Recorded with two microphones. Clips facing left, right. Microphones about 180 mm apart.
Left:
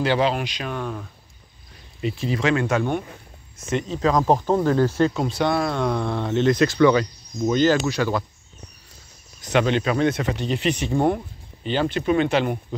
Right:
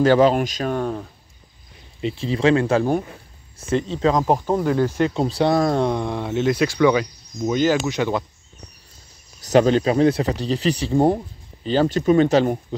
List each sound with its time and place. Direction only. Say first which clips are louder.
0.0 s speech: right 6 dB; 45° right (ahead or behind)
2.0 s speech: right 2 dB; 30° right (ahead or behind)
4.2 s speech: left 1 dB; 10° right (ahead or behind)
5.1 s speech: right 3 dB; 30° right (ahead or behind)
5.9 s speech: even; 15° right (ahead or behind)
9.4 s speech: right 5 dB; 40° right (ahead or behind)